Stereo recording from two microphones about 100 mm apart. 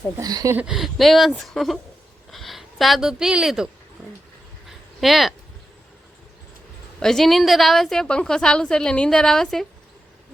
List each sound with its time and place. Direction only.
0.2 s speech: 40° right (ahead or behind)
0.7 s a woman's voice: centre (ahead or behind)
4.6 s a sound: centre (ahead or behind)
7.0 s a woman's voice: 5° left (ahead or behind)